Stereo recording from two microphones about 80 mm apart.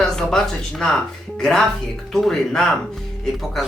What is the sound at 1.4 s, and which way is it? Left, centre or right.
Speech, centre.